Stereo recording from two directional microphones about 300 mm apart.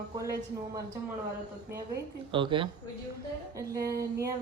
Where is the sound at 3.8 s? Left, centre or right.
Right.